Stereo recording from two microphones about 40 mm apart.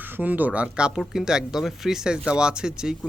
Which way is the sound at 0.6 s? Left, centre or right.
Right.